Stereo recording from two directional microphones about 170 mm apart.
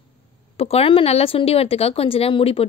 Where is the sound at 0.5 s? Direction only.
35° left (ahead or behind).